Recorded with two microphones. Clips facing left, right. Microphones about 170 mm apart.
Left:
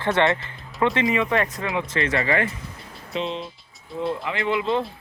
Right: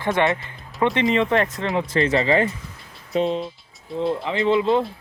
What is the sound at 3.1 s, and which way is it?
Speech, 45° right (ahead or behind).